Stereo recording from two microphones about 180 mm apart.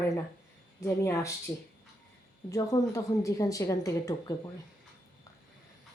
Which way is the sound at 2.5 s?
20° left (ahead or behind).